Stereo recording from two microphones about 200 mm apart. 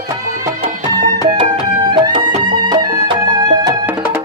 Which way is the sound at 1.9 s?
20° right (ahead or behind).